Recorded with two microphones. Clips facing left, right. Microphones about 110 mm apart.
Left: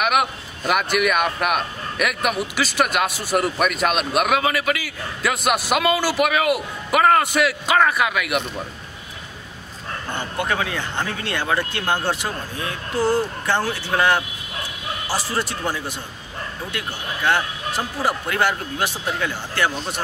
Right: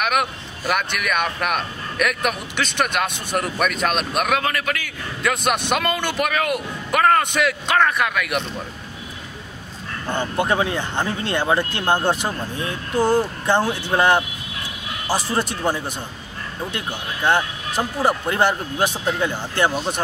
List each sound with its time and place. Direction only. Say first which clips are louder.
0.0 s speech: left 1 dB; 5° left (ahead or behind)
10.1 s speech: right 4 dB; 20° right (ahead or behind)